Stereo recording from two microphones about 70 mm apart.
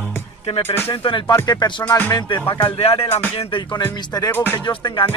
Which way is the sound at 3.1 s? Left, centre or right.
Left.